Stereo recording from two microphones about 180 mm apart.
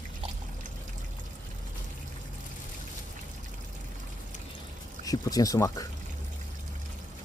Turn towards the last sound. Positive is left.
turn(degrees=20)  # may be behind; listen again after turning